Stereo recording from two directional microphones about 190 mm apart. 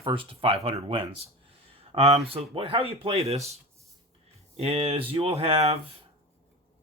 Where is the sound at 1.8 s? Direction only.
30° right (ahead or behind).